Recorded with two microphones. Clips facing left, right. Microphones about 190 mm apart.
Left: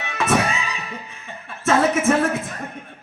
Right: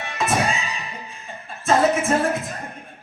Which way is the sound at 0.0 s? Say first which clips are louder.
Left 2 dB; 65° left (ahead or behind).